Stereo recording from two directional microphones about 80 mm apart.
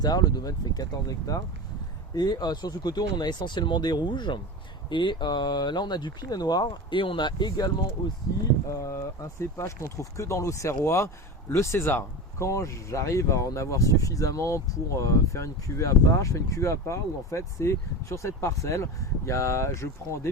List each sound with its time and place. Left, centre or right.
0.0 s speech: left
8.7 s speech: left